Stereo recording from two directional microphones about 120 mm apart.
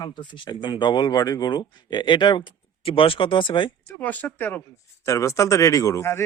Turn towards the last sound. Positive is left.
turn(degrees=20)  # may be behind; listen again after turning